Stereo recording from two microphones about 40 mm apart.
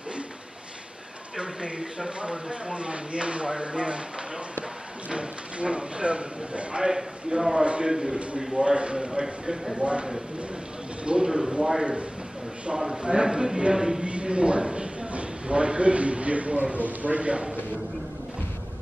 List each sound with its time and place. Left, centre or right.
1.3 s speech: right
5.1 s speech: right
6.9 s a man's voice: centre
7.6 s speech: right
7.9 s a man's voice: centre
11.1 s a man's voice: centre
13.0 s speech: right
14.0 s a sound: right
16.7 s a man's voice: right